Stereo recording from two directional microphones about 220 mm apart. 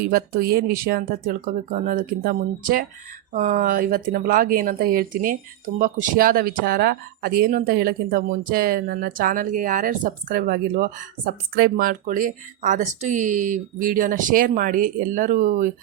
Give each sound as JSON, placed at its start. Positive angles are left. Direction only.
{"t": 0.0, "sound": "speech", "side_deg": -45}